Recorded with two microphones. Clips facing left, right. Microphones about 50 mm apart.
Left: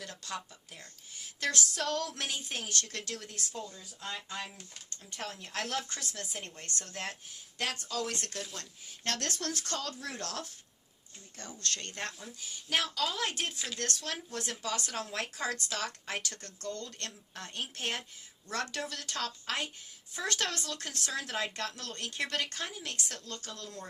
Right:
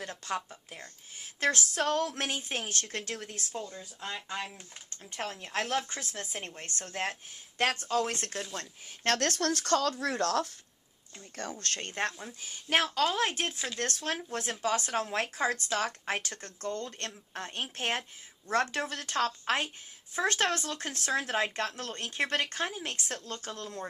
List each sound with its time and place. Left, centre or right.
0.0 s a woman's voice: right
5.1 s a woman's voice: right
9.0 s speech: right
10.0 s speech: right
11.3 s a woman's voice: right